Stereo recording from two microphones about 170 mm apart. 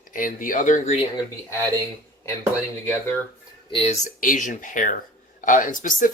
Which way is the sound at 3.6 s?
35° left (ahead or behind).